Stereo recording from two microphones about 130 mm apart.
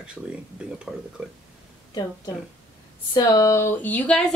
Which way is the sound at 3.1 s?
25° left (ahead or behind).